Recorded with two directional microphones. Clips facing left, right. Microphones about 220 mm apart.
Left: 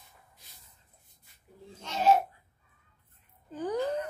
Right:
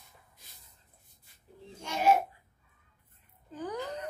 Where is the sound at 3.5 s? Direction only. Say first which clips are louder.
Left 5 dB; 30° left (ahead or behind).